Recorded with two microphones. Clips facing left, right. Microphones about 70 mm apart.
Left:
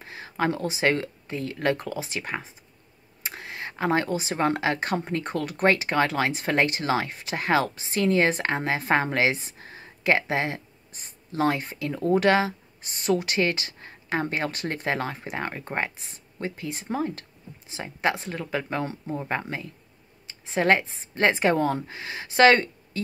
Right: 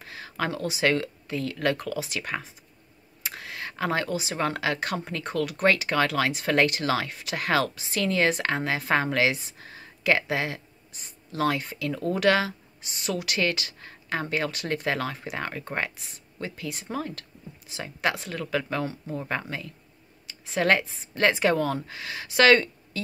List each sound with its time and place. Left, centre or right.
0.0 s speech: left
12.8 s speech: left